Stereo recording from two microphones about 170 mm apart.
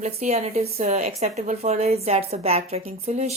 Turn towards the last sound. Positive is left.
turn(degrees=-40)  # may be behind; listen again after turning